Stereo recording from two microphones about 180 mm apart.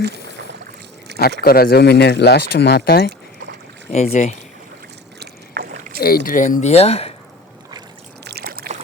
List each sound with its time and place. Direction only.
1.4 s speech: 55° left (ahead or behind)
3.9 s speech: 40° left (ahead or behind)
5.2 s rowboat: 60° right (ahead or behind)
6.0 s speech: 55° left (ahead or behind); by 7.1 s 35° left (ahead or behind)
8.2 s a sound: 65° right (ahead or behind)